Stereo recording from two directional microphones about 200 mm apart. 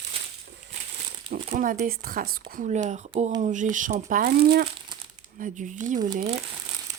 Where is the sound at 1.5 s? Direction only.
45° right (ahead or behind).